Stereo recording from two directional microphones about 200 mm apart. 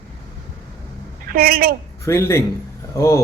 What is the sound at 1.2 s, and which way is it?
Speech, 50° right (ahead or behind).